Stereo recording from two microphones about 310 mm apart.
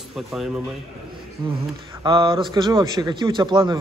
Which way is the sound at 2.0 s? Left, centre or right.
Centre.